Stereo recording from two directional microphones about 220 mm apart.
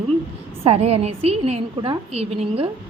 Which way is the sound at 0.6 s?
30° right (ahead or behind).